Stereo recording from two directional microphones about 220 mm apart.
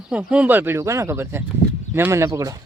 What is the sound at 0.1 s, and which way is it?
Speech, 5° right (ahead or behind).